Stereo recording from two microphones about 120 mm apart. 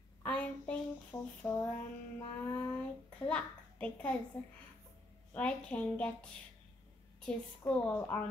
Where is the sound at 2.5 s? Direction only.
15° left (ahead or behind).